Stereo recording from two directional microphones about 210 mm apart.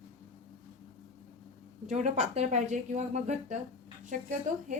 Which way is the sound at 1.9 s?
35° right (ahead or behind).